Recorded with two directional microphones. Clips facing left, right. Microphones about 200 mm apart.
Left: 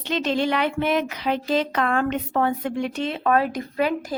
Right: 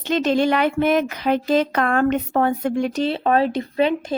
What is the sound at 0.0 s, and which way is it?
A woman's voice, 45° right (ahead or behind).